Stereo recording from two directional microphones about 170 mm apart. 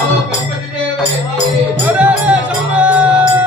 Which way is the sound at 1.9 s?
5° right (ahead or behind).